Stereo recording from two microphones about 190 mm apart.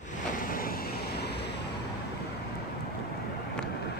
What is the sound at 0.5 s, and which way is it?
Vehicle, 50° left (ahead or behind).